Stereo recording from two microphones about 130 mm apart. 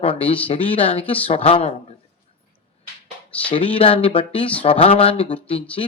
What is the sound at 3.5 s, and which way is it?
Speech, 40° left (ahead or behind).